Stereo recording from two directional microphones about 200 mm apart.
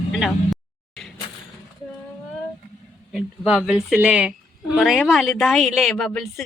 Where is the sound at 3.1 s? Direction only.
Centre (ahead or behind).